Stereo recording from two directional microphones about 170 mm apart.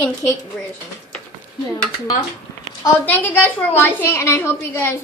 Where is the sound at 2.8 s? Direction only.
10° left (ahead or behind).